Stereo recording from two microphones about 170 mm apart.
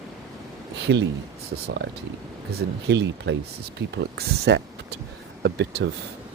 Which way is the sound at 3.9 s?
80° right.